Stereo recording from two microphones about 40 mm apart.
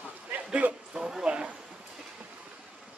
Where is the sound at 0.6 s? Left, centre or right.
Right.